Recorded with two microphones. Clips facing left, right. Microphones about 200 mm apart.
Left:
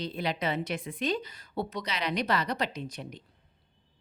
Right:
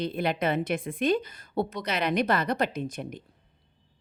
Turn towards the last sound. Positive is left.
turn(degrees=-50)  # may be behind; listen again after turning